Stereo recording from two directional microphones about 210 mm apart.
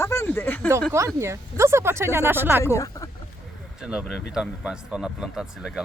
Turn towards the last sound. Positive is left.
turn(degrees=0)  # may be behind; listen again after turning